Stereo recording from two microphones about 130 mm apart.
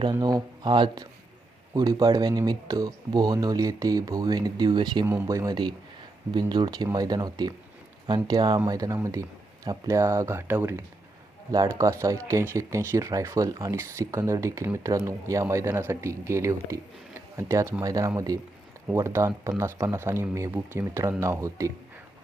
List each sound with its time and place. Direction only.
0.0 s speech: 30° right (ahead or behind)
5.0 s speech: 20° right (ahead or behind)